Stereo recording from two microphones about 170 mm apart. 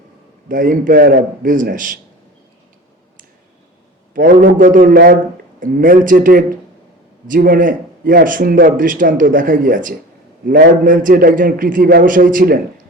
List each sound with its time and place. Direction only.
0.4 s speech: 50° right (ahead or behind)
4.1 s speech: 55° right (ahead or behind)